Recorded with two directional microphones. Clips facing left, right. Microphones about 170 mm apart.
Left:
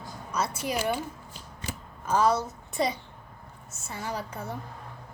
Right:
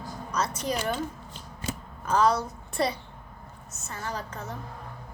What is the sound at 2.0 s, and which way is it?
A woman's voice, 5° left (ahead or behind).